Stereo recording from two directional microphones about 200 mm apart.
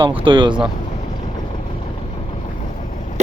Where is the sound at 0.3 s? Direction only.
25° right (ahead or behind).